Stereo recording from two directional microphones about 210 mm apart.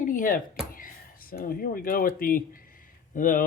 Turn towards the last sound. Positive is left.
turn(degrees=40)  # may be behind; listen again after turning